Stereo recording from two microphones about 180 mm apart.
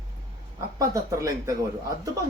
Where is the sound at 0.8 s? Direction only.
15° right (ahead or behind).